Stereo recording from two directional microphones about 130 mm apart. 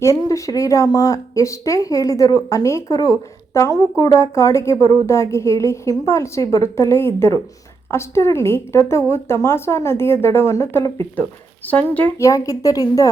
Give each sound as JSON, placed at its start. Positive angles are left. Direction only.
{"t": 0.0, "sound": "speech", "side_deg": 25}
{"t": 12.2, "sound": "speech", "side_deg": 25}